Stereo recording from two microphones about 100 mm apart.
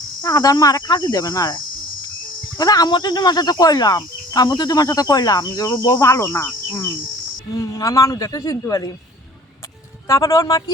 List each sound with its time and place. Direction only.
0.2 s speech: 35° left (ahead or behind)
5.9 s speech: 30° left (ahead or behind)
10.1 s speech: 30° left (ahead or behind)